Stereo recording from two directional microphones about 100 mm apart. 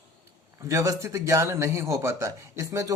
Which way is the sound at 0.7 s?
30° right (ahead or behind).